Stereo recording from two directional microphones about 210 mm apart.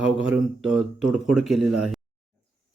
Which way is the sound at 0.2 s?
Centre (ahead or behind).